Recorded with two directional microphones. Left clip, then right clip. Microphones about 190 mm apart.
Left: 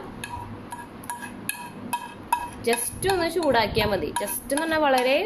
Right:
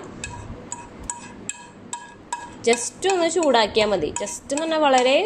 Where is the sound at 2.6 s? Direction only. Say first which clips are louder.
Right 4 dB; 20° right (ahead or behind).